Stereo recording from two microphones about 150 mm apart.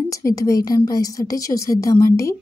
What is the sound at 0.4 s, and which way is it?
A woman's voice, 25° left (ahead or behind).